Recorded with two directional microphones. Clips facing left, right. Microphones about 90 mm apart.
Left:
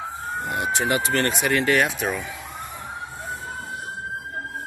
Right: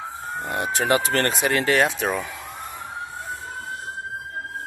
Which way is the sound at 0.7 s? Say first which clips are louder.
Right 3 dB; 35° right (ahead or behind).